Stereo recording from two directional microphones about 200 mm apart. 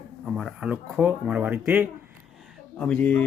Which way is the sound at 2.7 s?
5° left (ahead or behind).